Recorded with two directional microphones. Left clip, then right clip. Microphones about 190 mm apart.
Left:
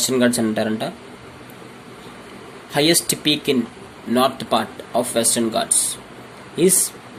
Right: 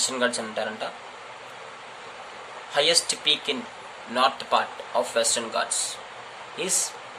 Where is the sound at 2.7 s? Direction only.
35° left (ahead or behind).